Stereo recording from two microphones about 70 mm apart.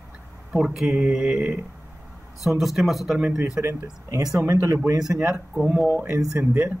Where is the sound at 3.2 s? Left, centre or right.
Centre.